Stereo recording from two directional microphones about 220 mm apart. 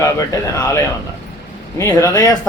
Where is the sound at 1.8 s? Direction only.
10° left (ahead or behind).